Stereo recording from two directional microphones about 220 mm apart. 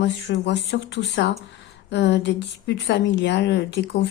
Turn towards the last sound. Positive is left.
turn(degrees=50)  # may be behind; listen again after turning